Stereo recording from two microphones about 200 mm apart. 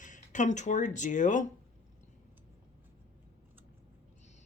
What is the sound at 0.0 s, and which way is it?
Speech, 40° left (ahead or behind).